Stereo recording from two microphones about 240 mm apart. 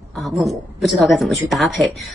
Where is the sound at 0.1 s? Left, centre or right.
Centre.